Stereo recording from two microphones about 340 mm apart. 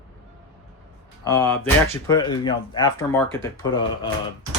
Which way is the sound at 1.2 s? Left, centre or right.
Centre.